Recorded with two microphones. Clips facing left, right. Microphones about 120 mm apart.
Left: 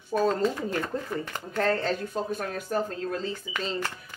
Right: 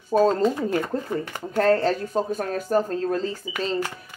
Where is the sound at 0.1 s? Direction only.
40° right (ahead or behind).